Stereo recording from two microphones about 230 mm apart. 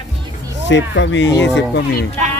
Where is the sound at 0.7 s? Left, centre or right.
Left.